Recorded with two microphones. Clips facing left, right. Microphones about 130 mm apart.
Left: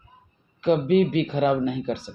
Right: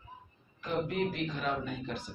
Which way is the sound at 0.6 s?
90° left.